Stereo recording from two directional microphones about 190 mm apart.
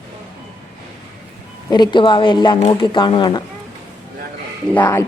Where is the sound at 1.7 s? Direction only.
25° left (ahead or behind).